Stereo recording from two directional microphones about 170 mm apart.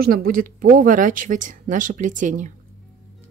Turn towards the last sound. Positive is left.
turn(degrees=-50)  # may be behind; listen again after turning